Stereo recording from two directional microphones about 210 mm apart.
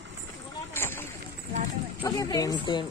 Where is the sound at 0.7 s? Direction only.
10° left (ahead or behind).